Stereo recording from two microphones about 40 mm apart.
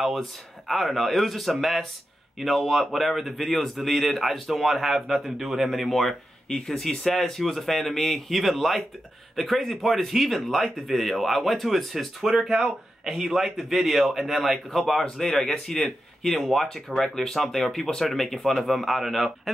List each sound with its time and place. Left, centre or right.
0.0 s a man's voice: centre
6.7 s a man's voice: centre